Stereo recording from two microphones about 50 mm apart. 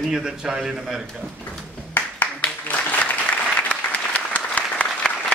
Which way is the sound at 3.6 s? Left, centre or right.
Left.